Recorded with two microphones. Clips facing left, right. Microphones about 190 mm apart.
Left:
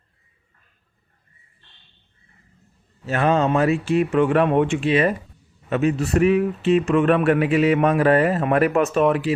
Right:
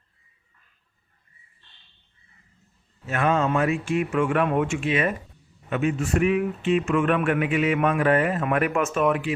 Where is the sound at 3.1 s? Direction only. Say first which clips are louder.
Left 4 dB; 35° left (ahead or behind).